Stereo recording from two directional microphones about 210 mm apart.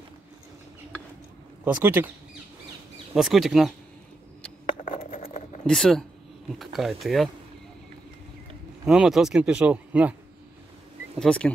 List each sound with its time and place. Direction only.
1.6 s speech: 10° right (ahead or behind)
3.2 s speech: centre (ahead or behind)
4.8 s a sound: 40° left (ahead or behind)
5.7 s speech: centre (ahead or behind)
8.8 s speech: centre (ahead or behind)
11.1 s speech: 5° left (ahead or behind)